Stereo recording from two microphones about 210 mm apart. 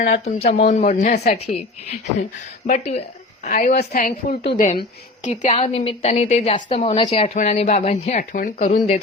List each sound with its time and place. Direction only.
0.0 s a woman's voice: 35° left (ahead or behind)
2.6 s a woman's voice: 35° left (ahead or behind)